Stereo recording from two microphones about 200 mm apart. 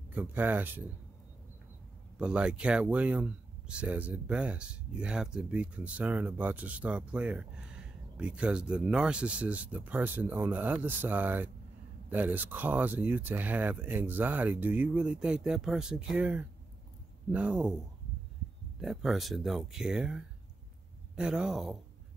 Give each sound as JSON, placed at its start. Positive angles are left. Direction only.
{"t": 0.1, "sound": "speech", "side_deg": -10}
{"t": 2.1, "sound": "speech", "side_deg": -5}
{"t": 18.8, "sound": "speech", "side_deg": 0}